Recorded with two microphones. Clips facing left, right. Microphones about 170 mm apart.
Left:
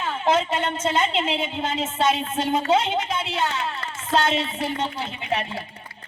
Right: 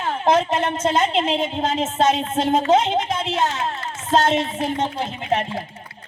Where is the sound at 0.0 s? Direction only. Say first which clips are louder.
Right 3 dB; 40° right (ahead or behind).